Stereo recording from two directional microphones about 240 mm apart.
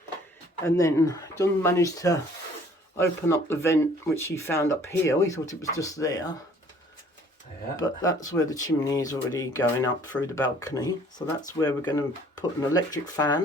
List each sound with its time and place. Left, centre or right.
0.6 s speech: centre
7.8 s speech: centre